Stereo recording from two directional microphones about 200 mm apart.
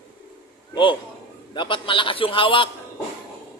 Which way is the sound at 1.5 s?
25° left (ahead or behind).